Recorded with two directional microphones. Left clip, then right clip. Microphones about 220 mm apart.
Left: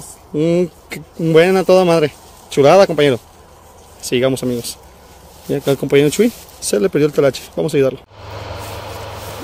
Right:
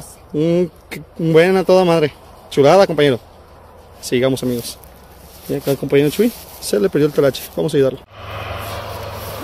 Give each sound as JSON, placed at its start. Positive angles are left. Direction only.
{"t": 0.3, "sound": "speech", "side_deg": 15}
{"t": 5.5, "sound": "speech", "side_deg": 25}
{"t": 8.3, "sound": "vehicle", "side_deg": 30}